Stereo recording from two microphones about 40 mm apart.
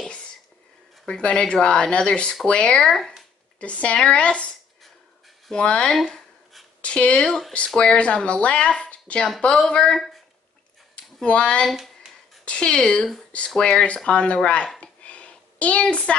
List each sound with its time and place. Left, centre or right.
1.0 s speech: left
3.5 s speech: left
5.6 s speech: left
5.9 s a sound: centre
6.8 s speech: left
7.2 s speech: centre
7.5 s speech: left
11.2 s speech: left
11.7 s a sound: centre
12.4 s speech: left
12.8 s speech: centre
14.8 s a sound: left